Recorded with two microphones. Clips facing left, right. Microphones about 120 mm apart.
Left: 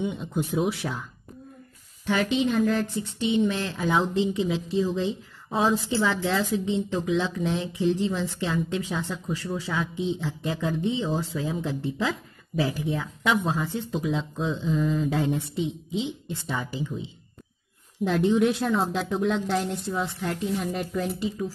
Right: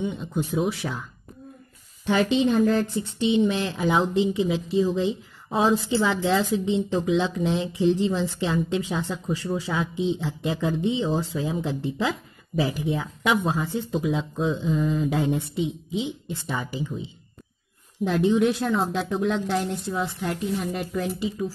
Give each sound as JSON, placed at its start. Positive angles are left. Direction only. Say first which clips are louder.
{"t": 0.0, "sound": "a woman's voice", "louder": "right 1 dB", "side_deg": 5}
{"t": 2.0, "sound": "a woman's voice", "louder": "right 3 dB", "side_deg": -30}
{"t": 3.2, "sound": "a woman's voice", "louder": "right 2 dB", "side_deg": -20}